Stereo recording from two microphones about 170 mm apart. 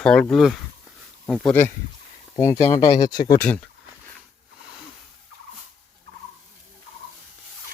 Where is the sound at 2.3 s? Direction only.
15° left (ahead or behind).